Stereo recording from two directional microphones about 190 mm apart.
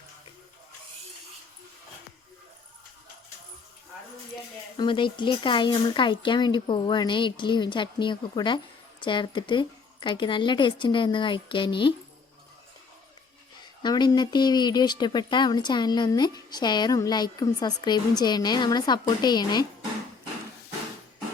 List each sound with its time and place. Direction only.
4.8 s speech: 25° left (ahead or behind)
13.8 s speech: 20° left (ahead or behind)